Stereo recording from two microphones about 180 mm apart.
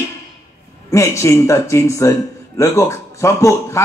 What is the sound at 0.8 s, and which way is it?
Speech, 15° left (ahead or behind).